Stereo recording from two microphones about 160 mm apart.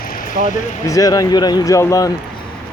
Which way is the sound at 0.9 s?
20° left (ahead or behind).